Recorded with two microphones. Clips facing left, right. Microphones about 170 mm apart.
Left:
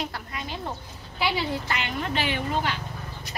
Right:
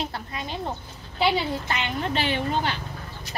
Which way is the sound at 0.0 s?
25° right (ahead or behind).